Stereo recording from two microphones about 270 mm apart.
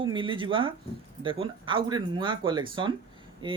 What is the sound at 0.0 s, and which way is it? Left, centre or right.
Speech, centre.